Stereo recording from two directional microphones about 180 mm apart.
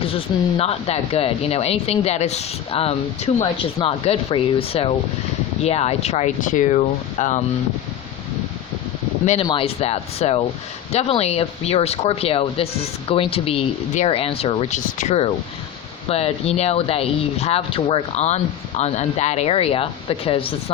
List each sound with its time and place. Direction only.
0.0 s speech: 30° left (ahead or behind)
9.2 s speech: 40° left (ahead or behind)